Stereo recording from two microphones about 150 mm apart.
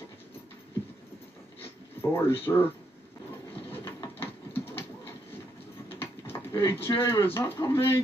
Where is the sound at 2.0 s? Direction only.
15° left (ahead or behind).